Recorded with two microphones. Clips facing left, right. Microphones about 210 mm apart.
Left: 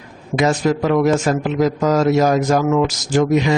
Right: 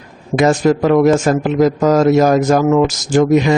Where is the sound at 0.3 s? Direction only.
50° right (ahead or behind).